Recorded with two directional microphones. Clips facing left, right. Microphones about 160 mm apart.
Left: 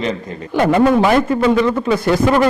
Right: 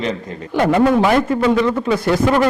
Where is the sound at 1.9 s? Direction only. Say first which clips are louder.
Left 1 dB; 10° left (ahead or behind).